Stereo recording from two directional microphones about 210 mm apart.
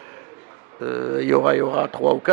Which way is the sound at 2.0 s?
30° right (ahead or behind).